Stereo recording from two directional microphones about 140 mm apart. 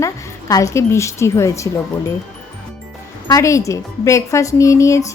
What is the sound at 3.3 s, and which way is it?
A woman's voice, 20° left (ahead or behind).